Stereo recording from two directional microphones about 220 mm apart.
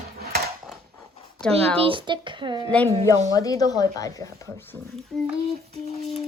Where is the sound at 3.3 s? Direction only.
15° left (ahead or behind).